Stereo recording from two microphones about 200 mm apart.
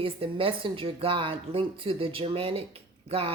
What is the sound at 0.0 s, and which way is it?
A woman's voice, 25° right (ahead or behind).